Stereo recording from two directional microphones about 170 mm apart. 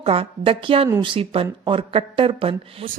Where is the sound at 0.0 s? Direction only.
35° right (ahead or behind).